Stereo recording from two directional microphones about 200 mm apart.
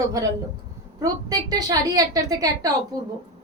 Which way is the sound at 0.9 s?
20° right (ahead or behind).